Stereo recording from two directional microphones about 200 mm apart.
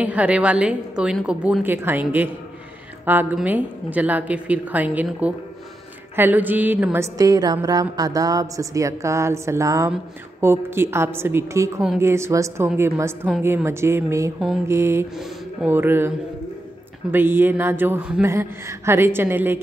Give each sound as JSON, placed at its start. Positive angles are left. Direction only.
{"t": 0.0, "sound": "a woman's voice", "side_deg": -5}
{"t": 3.1, "sound": "music", "side_deg": -10}
{"t": 17.1, "sound": "music", "side_deg": -10}